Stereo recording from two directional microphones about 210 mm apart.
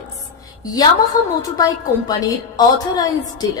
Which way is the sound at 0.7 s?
20° left (ahead or behind).